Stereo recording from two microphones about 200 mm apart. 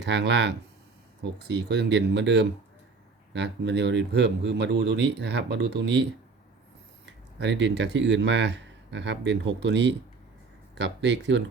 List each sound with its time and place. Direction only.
0.0 s speech: 60° right (ahead or behind)
7.0 s speech: 65° right (ahead or behind)